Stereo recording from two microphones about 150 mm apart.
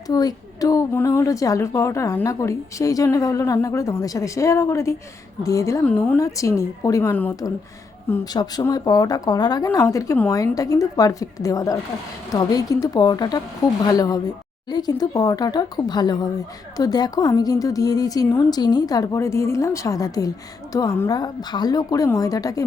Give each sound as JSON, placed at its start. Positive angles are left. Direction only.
{"t": 0.1, "sound": "a woman's voice", "side_deg": 25}
{"t": 5.8, "sound": "a woman's voice", "side_deg": 10}
{"t": 6.1, "sound": "a woman's voice", "side_deg": 20}
{"t": 8.2, "sound": "a woman's voice", "side_deg": 25}